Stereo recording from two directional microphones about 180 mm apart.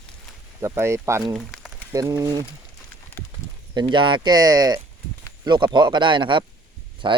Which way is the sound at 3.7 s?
25° right (ahead or behind).